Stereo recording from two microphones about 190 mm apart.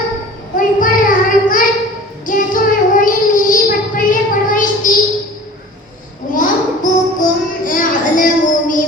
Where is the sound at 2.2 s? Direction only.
45° left (ahead or behind).